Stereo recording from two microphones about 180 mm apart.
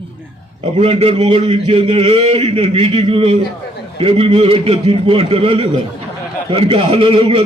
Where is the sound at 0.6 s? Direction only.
35° right (ahead or behind).